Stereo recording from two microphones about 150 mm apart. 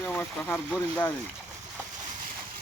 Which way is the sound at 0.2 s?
15° left (ahead or behind).